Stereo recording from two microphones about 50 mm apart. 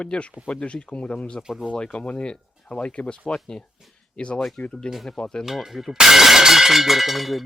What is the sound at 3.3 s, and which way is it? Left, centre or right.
Speech, centre.